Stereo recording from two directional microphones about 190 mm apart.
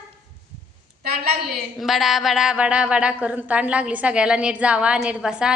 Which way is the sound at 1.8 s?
Centre (ahead or behind).